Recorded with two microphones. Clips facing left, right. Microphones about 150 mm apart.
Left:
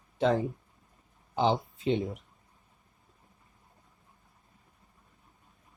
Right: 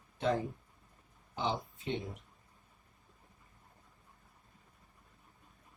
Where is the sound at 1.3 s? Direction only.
90° left.